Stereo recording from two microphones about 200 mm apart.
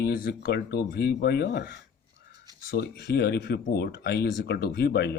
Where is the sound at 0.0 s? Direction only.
50° left (ahead or behind).